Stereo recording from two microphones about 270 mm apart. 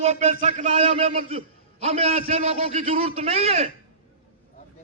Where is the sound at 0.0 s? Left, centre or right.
Right.